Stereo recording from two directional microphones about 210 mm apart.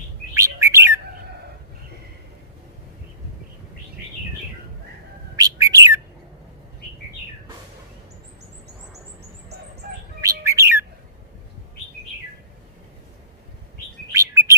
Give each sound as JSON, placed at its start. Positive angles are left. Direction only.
{"t": 0.3, "sound": "bird", "side_deg": -15}
{"t": 5.4, "sound": "bird", "side_deg": -15}
{"t": 10.2, "sound": "bird", "side_deg": -15}
{"t": 14.1, "sound": "chirp", "side_deg": -15}